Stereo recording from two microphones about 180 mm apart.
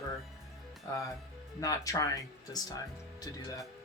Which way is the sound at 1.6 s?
20° left (ahead or behind).